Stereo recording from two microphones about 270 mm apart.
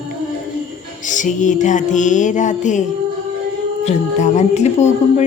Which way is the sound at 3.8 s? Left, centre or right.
Left.